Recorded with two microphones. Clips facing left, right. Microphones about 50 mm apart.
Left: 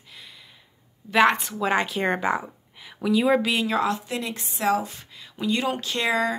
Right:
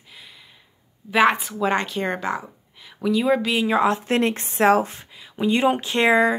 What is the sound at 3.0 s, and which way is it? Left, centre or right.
Speech, centre.